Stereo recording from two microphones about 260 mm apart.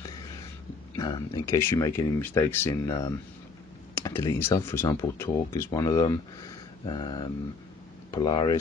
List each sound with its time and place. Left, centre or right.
0.9 s speech: centre